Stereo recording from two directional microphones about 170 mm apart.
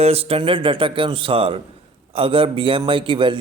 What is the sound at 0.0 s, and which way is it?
Speech, 35° right (ahead or behind).